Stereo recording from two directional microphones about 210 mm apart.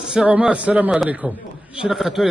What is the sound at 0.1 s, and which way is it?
A man's voice, 5° right (ahead or behind).